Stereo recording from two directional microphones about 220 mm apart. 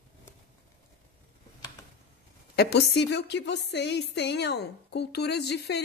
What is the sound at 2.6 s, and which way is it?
A woman's voice, 50° left (ahead or behind).